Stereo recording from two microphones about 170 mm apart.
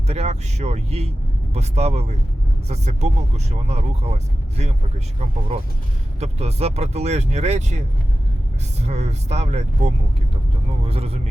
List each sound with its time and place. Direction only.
0.1 s speech: 40° right (ahead or behind)
6.1 s speech: 40° right (ahead or behind)
8.9 s speech: 40° right (ahead or behind)